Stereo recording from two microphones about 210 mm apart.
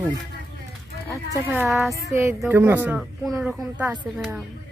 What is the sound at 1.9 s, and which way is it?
Speech, 15° right (ahead or behind).